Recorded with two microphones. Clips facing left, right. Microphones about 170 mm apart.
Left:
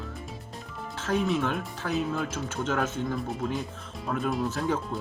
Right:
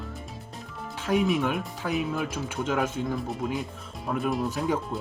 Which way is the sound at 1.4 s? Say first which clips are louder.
Right 2 dB; 10° right (ahead or behind).